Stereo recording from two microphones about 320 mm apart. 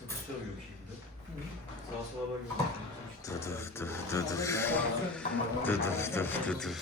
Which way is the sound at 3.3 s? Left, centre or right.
Centre.